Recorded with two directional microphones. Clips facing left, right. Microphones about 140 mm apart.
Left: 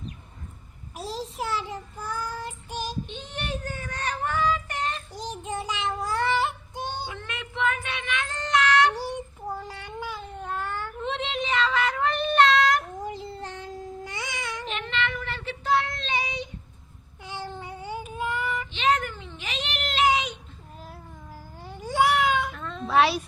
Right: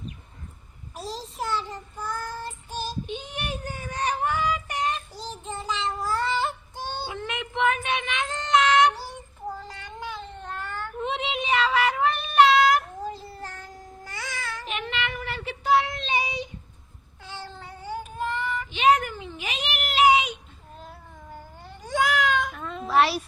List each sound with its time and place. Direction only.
0.9 s child singing: 10° left (ahead or behind)
3.1 s child singing: 10° right (ahead or behind)
5.1 s child singing: 15° left (ahead or behind)
6.3 s synthetic singing: 15° left (ahead or behind)
7.1 s child singing: 20° right (ahead or behind)
9.5 s cat: 10° left (ahead or behind)
11.0 s child singing: 5° right (ahead or behind)
13.0 s babbling: 15° left (ahead or behind)
14.6 s child singing: 10° right (ahead or behind)
17.2 s cat: 15° left (ahead or behind)
18.7 s a sound: 10° right (ahead or behind)
20.7 s cat: 5° left (ahead or behind)
22.5 s cat: 5° right (ahead or behind)